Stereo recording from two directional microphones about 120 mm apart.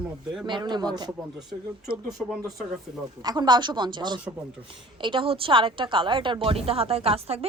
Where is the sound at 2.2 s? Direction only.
Centre (ahead or behind).